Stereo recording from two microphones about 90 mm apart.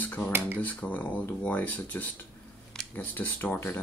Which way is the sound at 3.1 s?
20° left (ahead or behind).